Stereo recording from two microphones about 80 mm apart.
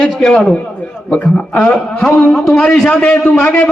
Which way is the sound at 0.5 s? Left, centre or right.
Centre.